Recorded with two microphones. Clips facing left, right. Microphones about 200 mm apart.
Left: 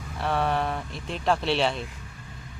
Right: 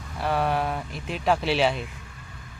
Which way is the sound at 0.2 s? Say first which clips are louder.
Right 1 dB; centre (ahead or behind).